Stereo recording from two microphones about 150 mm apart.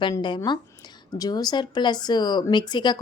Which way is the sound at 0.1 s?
30° left (ahead or behind).